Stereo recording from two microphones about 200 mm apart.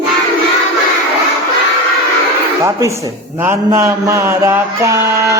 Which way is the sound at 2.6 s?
15° right (ahead or behind).